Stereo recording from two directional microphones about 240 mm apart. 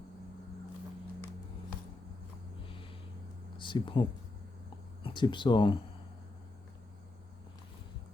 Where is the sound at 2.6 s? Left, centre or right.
Left.